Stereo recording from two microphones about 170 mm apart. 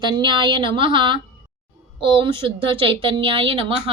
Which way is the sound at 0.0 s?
25° right (ahead or behind).